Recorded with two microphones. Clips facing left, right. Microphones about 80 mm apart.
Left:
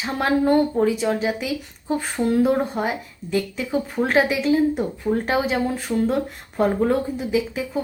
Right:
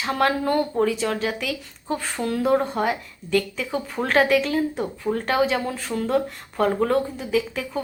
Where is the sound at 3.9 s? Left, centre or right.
Centre.